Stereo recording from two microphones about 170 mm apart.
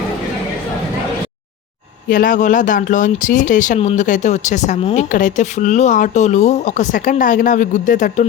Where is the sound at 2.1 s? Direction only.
55° left (ahead or behind).